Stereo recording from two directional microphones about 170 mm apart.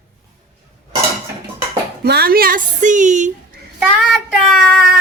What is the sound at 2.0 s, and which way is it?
Speech, 70° right (ahead or behind).